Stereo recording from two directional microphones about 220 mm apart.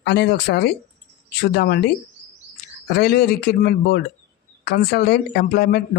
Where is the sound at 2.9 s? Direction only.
45° left (ahead or behind).